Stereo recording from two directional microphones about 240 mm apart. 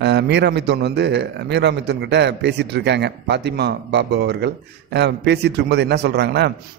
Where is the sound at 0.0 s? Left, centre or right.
Right.